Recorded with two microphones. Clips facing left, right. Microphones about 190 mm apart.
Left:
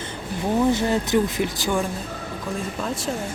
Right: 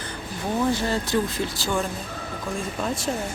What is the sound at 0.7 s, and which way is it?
Speech, 20° left (ahead or behind).